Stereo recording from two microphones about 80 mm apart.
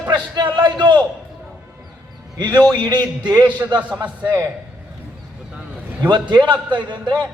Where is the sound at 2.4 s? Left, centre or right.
Right.